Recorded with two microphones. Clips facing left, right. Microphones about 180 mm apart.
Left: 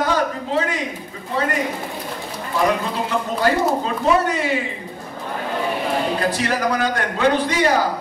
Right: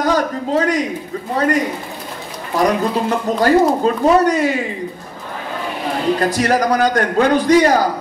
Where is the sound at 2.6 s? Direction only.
40° right (ahead or behind).